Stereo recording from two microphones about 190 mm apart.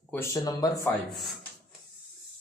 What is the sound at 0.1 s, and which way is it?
Speech, 15° left (ahead or behind).